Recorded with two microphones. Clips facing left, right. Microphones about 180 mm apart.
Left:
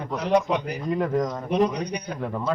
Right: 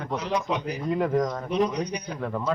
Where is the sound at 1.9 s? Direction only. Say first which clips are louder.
Left 2 dB; 55° left (ahead or behind).